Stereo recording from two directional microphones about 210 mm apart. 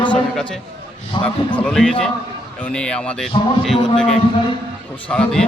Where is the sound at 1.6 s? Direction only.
5° left (ahead or behind).